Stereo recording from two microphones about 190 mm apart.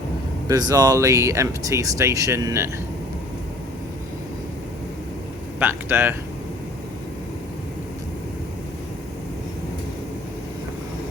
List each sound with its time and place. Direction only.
0.4 s speech: 20° right (ahead or behind)
5.5 s speech: 10° right (ahead or behind)